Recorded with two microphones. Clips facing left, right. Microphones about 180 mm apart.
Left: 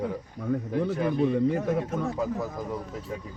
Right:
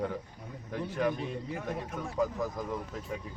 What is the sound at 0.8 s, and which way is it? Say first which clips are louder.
Speech: left 5 dB; 75° left (ahead or behind).